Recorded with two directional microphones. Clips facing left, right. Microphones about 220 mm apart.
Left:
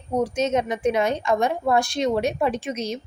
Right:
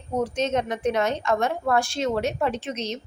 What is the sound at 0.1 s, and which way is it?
A woman's voice, 10° left (ahead or behind).